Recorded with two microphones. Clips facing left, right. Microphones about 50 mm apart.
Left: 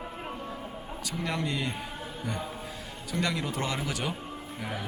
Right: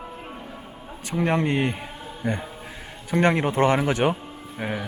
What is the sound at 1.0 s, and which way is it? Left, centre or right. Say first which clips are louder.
Speech: right 10 dB; right.